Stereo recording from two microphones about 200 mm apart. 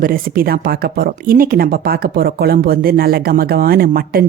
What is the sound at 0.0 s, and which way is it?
Speech, 45° right (ahead or behind).